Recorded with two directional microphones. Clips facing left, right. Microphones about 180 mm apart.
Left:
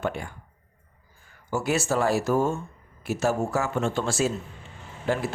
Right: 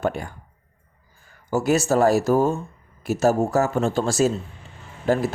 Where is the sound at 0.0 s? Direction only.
40° right (ahead or behind).